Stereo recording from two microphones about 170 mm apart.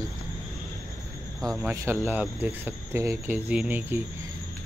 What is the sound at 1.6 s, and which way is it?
Speech, 15° right (ahead or behind).